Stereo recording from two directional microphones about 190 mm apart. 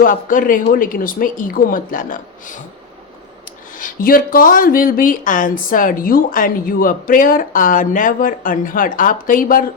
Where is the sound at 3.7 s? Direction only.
45° left (ahead or behind).